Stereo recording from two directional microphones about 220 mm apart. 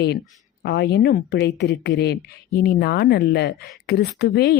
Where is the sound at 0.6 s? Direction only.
50° left (ahead or behind).